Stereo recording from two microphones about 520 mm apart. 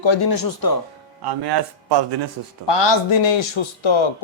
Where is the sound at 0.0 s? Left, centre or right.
Left.